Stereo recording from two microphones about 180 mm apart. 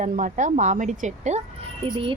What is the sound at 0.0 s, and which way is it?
A woman's voice, 45° right (ahead or behind).